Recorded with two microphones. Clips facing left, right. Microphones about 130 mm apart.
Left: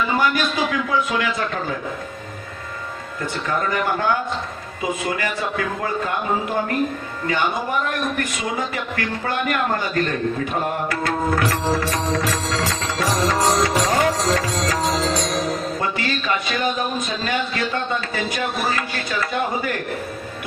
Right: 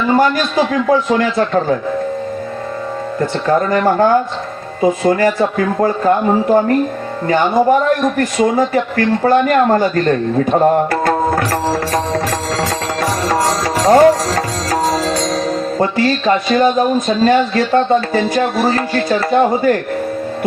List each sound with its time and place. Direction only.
0.1 s speech: 45° right (ahead or behind)
3.2 s speech: 45° right (ahead or behind)
10.5 s music: 40° right (ahead or behind)
15.8 s speech: 40° right (ahead or behind)